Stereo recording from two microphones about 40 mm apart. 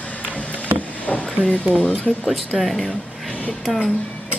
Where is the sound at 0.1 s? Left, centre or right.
Left.